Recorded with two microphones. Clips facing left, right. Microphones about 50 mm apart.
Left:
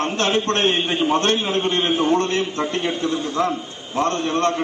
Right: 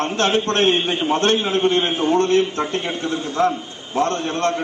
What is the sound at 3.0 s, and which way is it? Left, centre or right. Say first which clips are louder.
Speech: right 4 dB; right.